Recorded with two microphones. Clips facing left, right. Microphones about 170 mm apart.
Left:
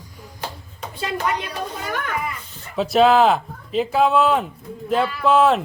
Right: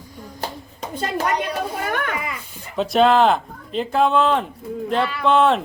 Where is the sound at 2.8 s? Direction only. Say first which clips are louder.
Left 1 dB; centre (ahead or behind).